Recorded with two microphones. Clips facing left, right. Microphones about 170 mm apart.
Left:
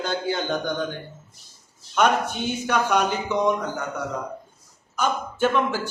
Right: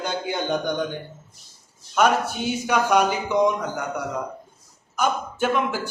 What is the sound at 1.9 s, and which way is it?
A man's voice, 5° right (ahead or behind).